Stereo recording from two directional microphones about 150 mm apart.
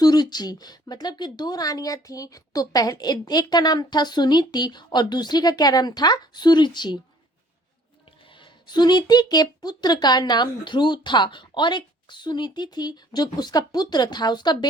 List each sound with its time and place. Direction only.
0.0 s speech: 25° left (ahead or behind)
8.4 s speech: 30° left (ahead or behind)